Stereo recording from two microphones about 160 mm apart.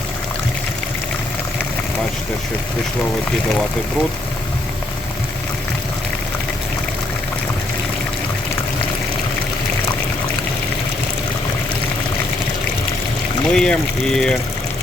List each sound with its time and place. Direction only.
13.5 s speech: 5° left (ahead or behind)